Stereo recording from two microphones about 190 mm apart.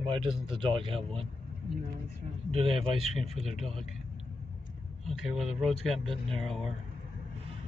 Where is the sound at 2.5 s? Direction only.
30° right (ahead or behind).